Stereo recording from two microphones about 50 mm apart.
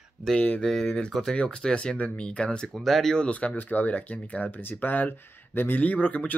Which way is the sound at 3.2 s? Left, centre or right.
Left.